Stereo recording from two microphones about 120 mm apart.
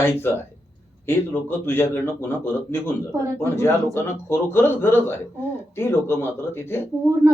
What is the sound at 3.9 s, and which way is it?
Speech, 20° left (ahead or behind).